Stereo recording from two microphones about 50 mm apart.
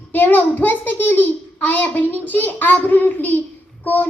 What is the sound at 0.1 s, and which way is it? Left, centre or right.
A child's voice, left.